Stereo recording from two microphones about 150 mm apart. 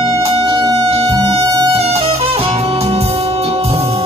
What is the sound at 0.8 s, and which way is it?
Music, 40° right (ahead or behind).